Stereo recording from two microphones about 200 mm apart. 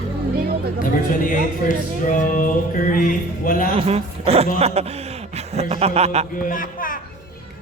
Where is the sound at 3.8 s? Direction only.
30° right (ahead or behind).